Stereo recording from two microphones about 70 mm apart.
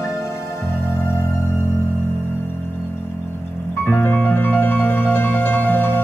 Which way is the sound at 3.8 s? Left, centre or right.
Left.